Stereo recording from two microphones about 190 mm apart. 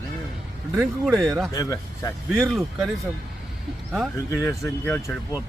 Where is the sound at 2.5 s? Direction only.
Centre (ahead or behind).